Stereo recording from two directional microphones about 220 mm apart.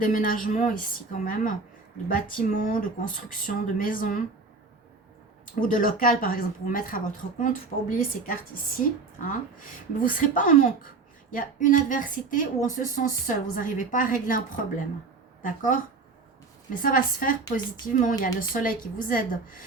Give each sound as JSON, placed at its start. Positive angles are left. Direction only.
{"t": 0.0, "sound": "speech", "side_deg": 40}
{"t": 5.5, "sound": "speech", "side_deg": 40}
{"t": 10.0, "sound": "a woman's voice", "side_deg": 40}